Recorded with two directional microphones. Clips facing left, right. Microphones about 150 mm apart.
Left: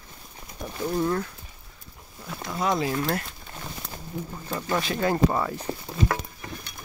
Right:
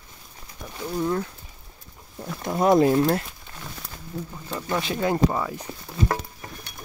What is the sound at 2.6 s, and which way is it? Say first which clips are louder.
Speech: right 8 dB; 50° right (ahead or behind).